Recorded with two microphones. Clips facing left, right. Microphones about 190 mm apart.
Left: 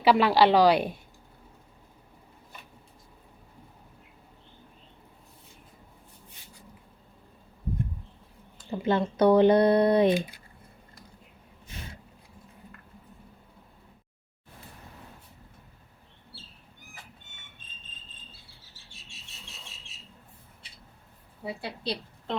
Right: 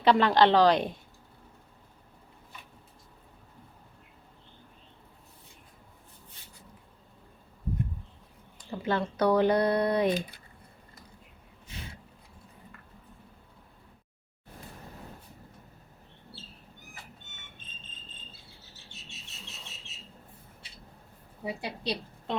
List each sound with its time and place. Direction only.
0.0 s a woman's voice: 5° left (ahead or behind)
8.7 s speech: 20° left (ahead or behind)
21.4 s a woman's voice: 15° right (ahead or behind)